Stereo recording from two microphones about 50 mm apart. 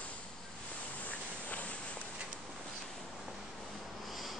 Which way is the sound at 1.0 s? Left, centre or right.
Left.